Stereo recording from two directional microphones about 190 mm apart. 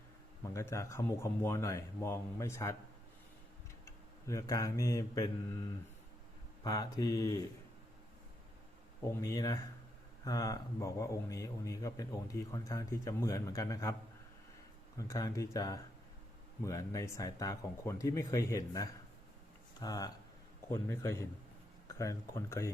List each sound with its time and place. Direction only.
0.4 s speech: 15° left (ahead or behind)
3.8 s mantra: 15° left (ahead or behind)
6.7 s speech: 20° left (ahead or behind)
9.2 s speech: 20° left (ahead or behind)
14.9 s speech: 15° left (ahead or behind)